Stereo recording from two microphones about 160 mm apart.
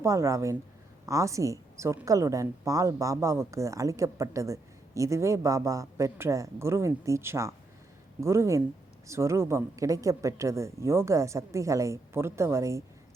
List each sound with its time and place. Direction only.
0.0 s a woman's voice: 20° right (ahead or behind)